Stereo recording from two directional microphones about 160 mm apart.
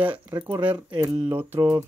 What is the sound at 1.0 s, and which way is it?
Speech, 30° right (ahead or behind).